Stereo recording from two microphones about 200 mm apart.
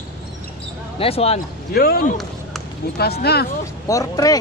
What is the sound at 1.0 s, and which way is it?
Speech, 30° left (ahead or behind).